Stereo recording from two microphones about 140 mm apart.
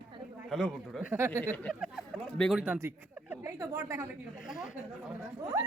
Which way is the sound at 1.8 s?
Centre (ahead or behind).